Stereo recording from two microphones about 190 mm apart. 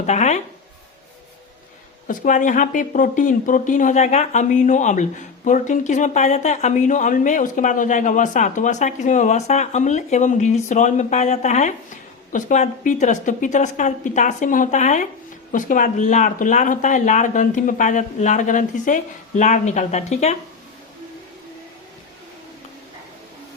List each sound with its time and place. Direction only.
0.0 s speech: 35° left (ahead or behind)
2.0 s speech: 45° left (ahead or behind)